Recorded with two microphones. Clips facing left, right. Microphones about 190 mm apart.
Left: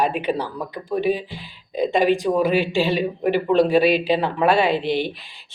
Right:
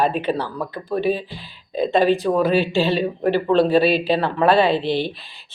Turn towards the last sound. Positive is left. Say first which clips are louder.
# right 2 dB
turn(degrees=15)  # may be behind; listen again after turning